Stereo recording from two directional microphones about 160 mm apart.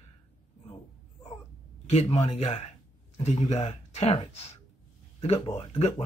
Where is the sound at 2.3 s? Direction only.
35° left (ahead or behind).